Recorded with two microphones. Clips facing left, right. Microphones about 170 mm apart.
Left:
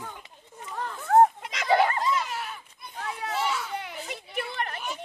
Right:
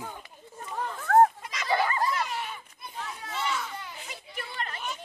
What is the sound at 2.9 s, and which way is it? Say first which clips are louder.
Children playing: left 5 dB; 65° left (ahead or behind).